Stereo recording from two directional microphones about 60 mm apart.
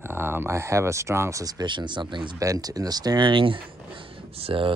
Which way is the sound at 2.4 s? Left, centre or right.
Right.